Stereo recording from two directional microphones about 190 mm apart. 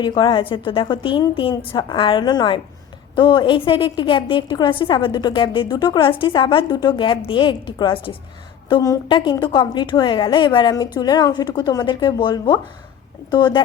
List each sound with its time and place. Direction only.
0.0 s a woman's voice: 25° left (ahead or behind)